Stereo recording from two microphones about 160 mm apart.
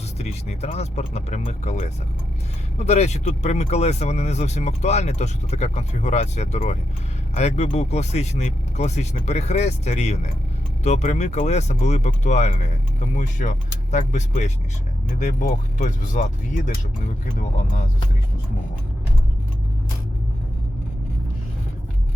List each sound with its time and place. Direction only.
0.2 s speech: 40° left (ahead or behind)